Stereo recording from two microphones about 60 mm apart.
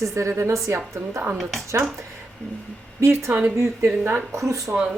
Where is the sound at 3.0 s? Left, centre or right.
Right.